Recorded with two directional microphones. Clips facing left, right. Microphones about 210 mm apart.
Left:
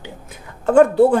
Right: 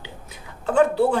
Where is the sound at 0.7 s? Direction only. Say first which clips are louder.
Left 6 dB; 50° left (ahead or behind).